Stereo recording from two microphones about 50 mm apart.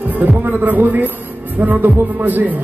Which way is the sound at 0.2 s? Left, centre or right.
Right.